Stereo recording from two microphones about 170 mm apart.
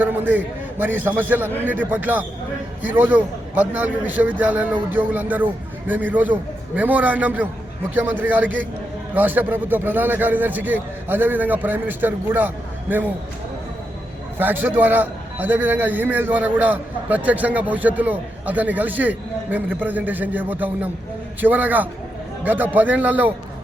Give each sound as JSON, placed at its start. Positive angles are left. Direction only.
{"t": 0.0, "sound": "a man's voice", "side_deg": -10}
{"t": 14.3, "sound": "a man's voice", "side_deg": -10}